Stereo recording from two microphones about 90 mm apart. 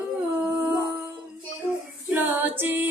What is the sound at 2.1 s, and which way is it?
A capella, 15° right (ahead or behind).